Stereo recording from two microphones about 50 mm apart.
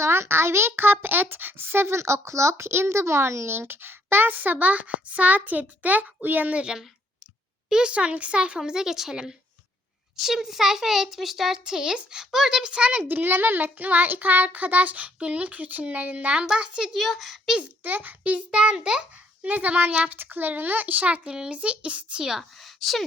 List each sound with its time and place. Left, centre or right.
0.0 s speech: right
2.0 s a child's voice: right
13.1 s a child's voice: right; by 16.9 s centre
16.9 s a child's voice: centre
17.6 s a child's voice: right; by 19.0 s centre
19.4 s a child's voice: right
21.2 s a child's voice: centre
22.6 s a sound: centre